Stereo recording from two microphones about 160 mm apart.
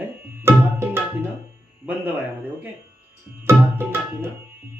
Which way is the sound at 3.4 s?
15° right (ahead or behind).